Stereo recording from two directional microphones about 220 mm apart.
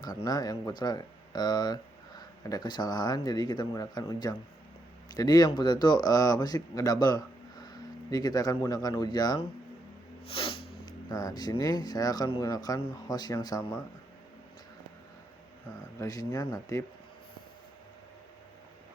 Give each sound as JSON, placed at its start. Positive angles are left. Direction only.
{"t": 0.3, "sound": "speech", "side_deg": 15}
{"t": 16.0, "sound": "speech", "side_deg": 15}